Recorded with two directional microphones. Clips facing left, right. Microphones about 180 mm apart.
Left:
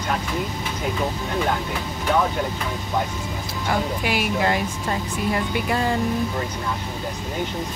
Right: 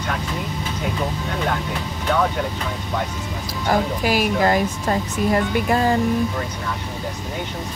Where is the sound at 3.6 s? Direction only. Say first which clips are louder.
Right 4 dB; 40° right (ahead or behind).